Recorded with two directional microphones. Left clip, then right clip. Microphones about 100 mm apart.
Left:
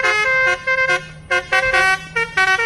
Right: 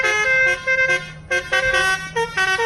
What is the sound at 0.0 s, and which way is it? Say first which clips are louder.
Vehicle: left 1 dB; 20° left (ahead or behind).